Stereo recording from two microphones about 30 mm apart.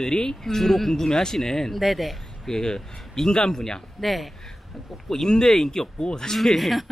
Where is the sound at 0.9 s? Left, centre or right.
Left.